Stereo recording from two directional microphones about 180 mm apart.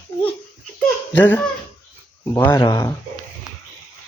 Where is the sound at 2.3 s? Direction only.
15° left (ahead or behind).